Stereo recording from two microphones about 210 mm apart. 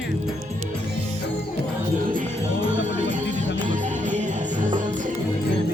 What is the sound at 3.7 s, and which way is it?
Music, 35° right (ahead or behind).